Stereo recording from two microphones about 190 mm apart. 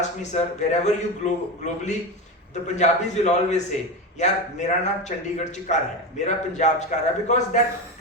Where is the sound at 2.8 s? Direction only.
35° left (ahead or behind).